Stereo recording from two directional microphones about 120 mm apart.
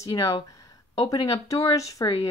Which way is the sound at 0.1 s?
30° left (ahead or behind).